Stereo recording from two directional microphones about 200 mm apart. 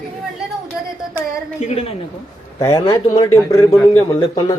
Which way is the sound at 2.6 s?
15° left (ahead or behind).